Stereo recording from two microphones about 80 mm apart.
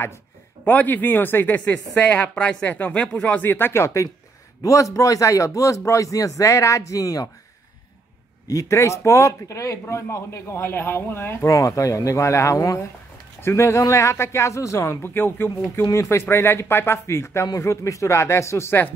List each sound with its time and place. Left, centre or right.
0.7 s a woman's voice: left
8.5 s a man's voice: left
15.8 s a man's voice: left